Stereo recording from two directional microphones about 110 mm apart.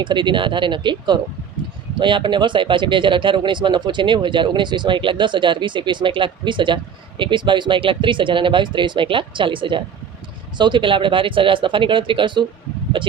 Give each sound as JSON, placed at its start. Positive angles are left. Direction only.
{"t": 0.0, "sound": "speech", "side_deg": -45}